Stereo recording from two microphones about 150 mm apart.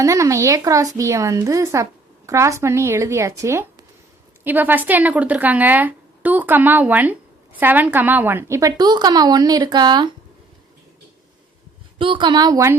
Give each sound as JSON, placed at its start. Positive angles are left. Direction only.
{"t": 0.0, "sound": "speech", "side_deg": -20}
{"t": 11.9, "sound": "speech", "side_deg": -35}